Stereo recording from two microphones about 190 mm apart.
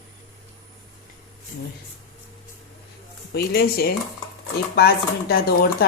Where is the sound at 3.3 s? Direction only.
55° left (ahead or behind).